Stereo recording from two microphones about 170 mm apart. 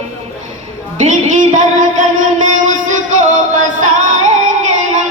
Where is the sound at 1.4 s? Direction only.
50° right (ahead or behind).